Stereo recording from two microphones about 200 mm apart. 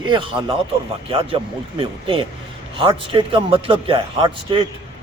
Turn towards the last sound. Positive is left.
turn(degrees=-25)  # may be behind; listen again after turning